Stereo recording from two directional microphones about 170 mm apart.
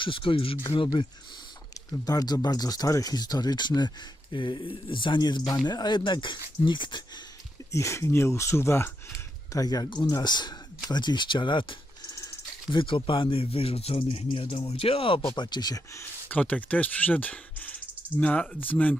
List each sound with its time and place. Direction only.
0.0 s speech: 30° left (ahead or behind)
7.7 s speech: 15° left (ahead or behind)
12.1 s a sound: 20° left (ahead or behind)
12.8 s speech: 30° left (ahead or behind)
16.3 s speech: 10° left (ahead or behind)